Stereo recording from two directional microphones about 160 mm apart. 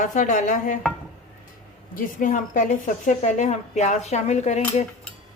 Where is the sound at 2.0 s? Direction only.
55° left (ahead or behind).